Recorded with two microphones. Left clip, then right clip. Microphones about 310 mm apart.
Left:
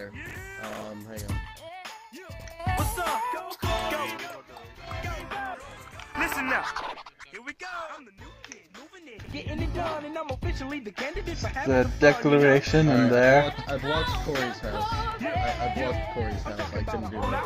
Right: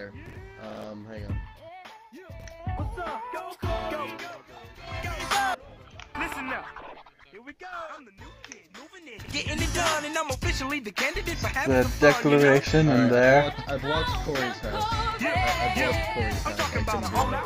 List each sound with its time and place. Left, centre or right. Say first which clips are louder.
0.2 s music: left 6 dB; left
2.6 s music: left 8 dB; left
3.0 s music: left 5 dB; centre
4.8 s music: right 1 dB; centre
5.2 s music: right 13 dB; right
6.1 s music: left 5 dB; centre
6.6 s speech: left 9 dB; left
7.7 s speech: right 1 dB; centre
9.3 s music: right 6 dB; right
10.6 s speech: right 5 dB; centre
12.3 s speech: even; centre
14.5 s music: right 1 dB; centre